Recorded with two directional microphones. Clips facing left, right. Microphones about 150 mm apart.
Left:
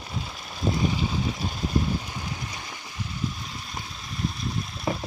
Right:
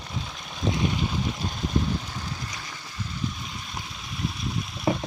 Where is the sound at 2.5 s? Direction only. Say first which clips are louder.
Left 1 dB; 25° left (ahead or behind).